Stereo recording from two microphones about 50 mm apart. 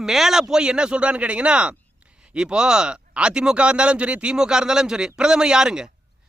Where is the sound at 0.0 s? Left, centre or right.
Centre.